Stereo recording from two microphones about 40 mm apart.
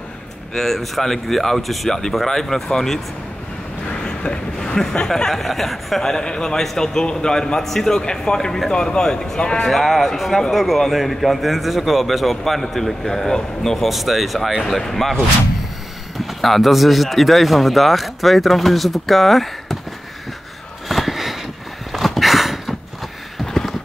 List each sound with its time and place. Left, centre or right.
0.6 s speech: centre
1.9 s speech: centre
4.0 s vehicle: left
5.0 s speech: centre
6.1 s a man's voice: centre
6.6 s a man's voice: centre
9.7 s speech: centre
16.3 s speech: centre
20.9 s a sound: centre
23.3 s a sound: centre